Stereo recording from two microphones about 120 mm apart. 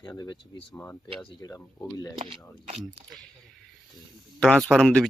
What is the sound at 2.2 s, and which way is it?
Speech, 50° right (ahead or behind).